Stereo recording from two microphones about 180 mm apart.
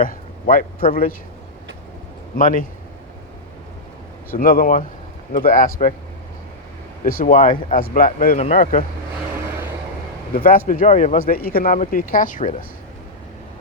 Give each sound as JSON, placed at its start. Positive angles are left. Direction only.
{"t": 0.0, "sound": "a sound", "side_deg": 50}
{"t": 2.3, "sound": "speech", "side_deg": 50}
{"t": 4.3, "sound": "speech", "side_deg": 55}
{"t": 7.0, "sound": "speech", "side_deg": 50}
{"t": 8.4, "sound": "speech", "side_deg": 35}
{"t": 10.3, "sound": "speech", "side_deg": 55}
{"t": 11.3, "sound": "speech", "side_deg": 55}